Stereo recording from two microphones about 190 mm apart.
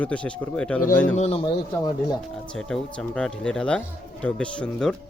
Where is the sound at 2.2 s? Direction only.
5° left (ahead or behind).